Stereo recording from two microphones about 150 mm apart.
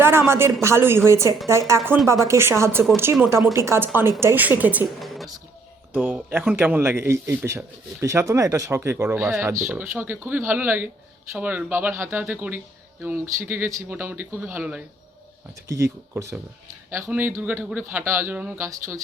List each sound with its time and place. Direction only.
0.0 s a woman's voice: 15° right (ahead or behind)
4.9 s a sound: centre (ahead or behind)
5.9 s speech: 10° right (ahead or behind)